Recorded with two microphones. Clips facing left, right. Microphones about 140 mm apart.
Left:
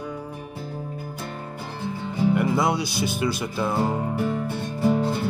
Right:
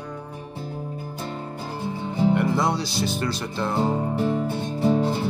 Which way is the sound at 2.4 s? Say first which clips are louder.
Even; 5° left (ahead or behind).